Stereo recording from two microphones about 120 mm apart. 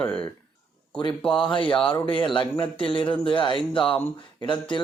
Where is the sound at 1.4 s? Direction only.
40° left (ahead or behind).